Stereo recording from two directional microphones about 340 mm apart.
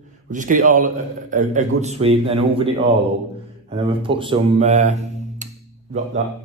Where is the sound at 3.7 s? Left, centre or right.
Centre.